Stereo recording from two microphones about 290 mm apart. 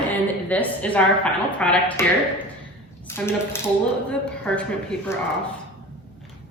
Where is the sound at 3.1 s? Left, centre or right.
Centre.